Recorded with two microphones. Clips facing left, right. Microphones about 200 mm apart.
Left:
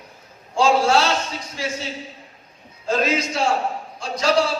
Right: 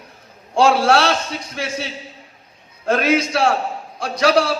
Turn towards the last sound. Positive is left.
turn(degrees=-70)  # may be behind; listen again after turning